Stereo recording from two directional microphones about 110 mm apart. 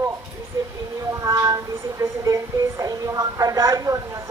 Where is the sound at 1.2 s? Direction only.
30° right (ahead or behind).